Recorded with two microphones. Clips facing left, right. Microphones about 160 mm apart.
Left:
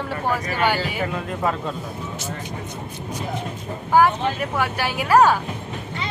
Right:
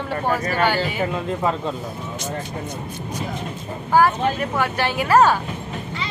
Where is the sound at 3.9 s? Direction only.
15° left (ahead or behind).